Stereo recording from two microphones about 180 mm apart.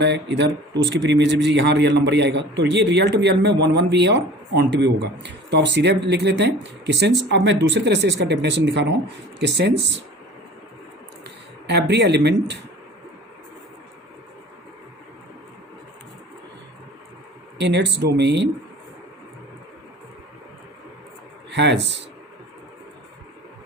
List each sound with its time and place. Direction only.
0.0 s speech: 75° right (ahead or behind)
11.6 s speech: 65° right (ahead or behind)
17.6 s speech: 75° right (ahead or behind)
21.5 s speech: 70° right (ahead or behind)